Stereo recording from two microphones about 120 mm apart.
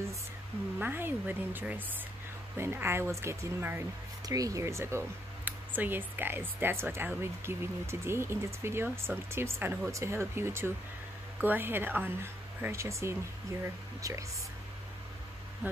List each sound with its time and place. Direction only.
0.7 s speech: 15° right (ahead or behind)